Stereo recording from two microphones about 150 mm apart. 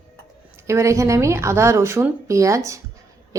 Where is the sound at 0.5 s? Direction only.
20° right (ahead or behind).